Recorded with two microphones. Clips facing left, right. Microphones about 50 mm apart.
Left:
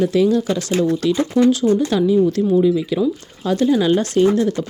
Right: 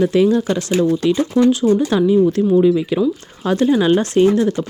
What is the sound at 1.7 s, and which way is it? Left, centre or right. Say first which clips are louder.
Speech: right 2 dB; right.